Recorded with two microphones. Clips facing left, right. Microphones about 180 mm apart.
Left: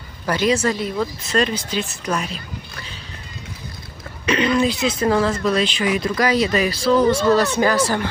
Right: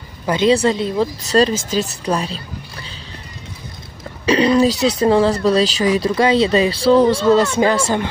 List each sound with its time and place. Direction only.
0.3 s speech: 25° right (ahead or behind)
4.3 s speech: 35° right (ahead or behind)